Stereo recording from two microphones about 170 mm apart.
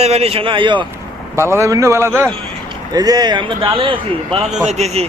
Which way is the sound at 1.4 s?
15° right (ahead or behind).